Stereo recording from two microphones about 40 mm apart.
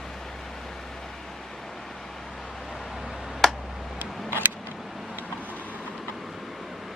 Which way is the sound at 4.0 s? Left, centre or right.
Right.